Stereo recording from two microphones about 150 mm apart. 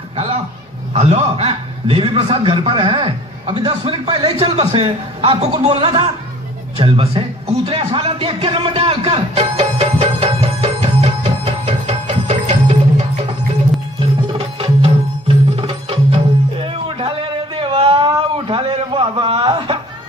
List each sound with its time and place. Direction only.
0.9 s a man's voice: 45° right (ahead or behind)
7.9 s music: 40° right (ahead or behind)
14.6 s music: 40° right (ahead or behind)